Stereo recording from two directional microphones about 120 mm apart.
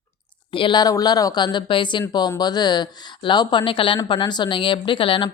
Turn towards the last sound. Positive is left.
turn(degrees=45)  # may be behind; listen again after turning